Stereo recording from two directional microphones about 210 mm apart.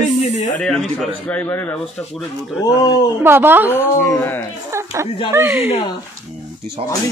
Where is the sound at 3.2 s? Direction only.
10° right (ahead or behind).